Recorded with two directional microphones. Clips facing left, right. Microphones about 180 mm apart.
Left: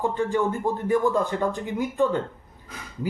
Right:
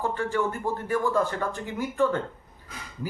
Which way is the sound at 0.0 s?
15° left (ahead or behind).